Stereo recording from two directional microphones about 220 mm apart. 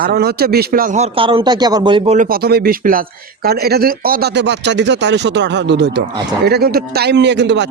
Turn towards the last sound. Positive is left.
turn(degrees=-50)  # may be behind; listen again after turning